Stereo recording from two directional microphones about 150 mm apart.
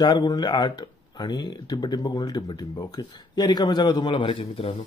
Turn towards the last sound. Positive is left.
turn(degrees=40)  # may be behind; listen again after turning